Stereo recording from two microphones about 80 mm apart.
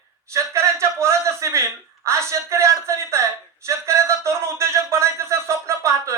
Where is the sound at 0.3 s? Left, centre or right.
Right.